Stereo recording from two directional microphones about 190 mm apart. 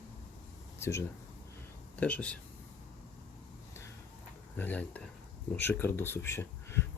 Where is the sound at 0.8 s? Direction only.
15° left (ahead or behind).